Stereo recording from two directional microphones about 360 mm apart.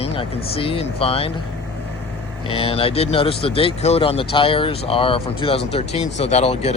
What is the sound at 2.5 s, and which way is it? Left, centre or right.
Speech, centre.